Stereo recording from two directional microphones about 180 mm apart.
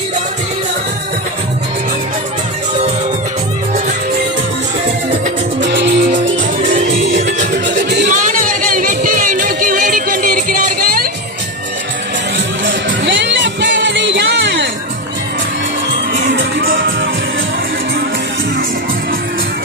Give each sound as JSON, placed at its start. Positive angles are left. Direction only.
{"t": 5.5, "sound": "music", "side_deg": -75}
{"t": 6.6, "sound": "music", "side_deg": -45}
{"t": 8.0, "sound": "music", "side_deg": -45}
{"t": 12.6, "sound": "music", "side_deg": -90}
{"t": 16.3, "sound": "music", "side_deg": -90}